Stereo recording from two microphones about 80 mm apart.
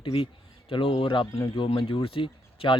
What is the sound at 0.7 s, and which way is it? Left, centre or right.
Speech, left.